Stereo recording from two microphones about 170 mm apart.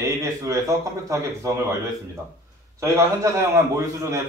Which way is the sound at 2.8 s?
15° right (ahead or behind).